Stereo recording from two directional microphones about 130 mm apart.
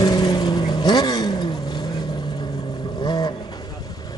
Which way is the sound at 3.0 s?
35° left (ahead or behind).